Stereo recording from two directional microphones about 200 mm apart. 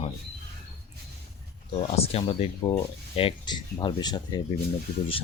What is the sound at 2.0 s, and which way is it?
Speech, 30° left (ahead or behind).